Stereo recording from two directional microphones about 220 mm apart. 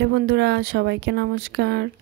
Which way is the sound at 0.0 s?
50° right (ahead or behind).